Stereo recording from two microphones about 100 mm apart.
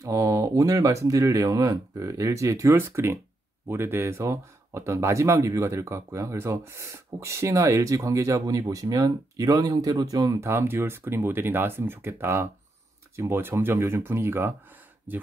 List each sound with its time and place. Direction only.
0.0 s speech: 30° right (ahead or behind)
10.4 s speech: 25° right (ahead or behind)